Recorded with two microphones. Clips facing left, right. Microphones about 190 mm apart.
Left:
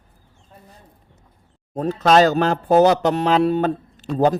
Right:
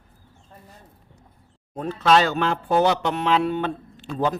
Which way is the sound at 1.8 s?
40° left (ahead or behind).